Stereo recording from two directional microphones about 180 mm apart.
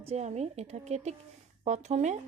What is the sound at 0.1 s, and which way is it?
A woman's voice, 40° right (ahead or behind).